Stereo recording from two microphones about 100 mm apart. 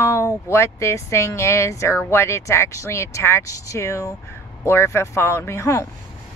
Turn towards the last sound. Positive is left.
turn(degrees=30)  # may be behind; listen again after turning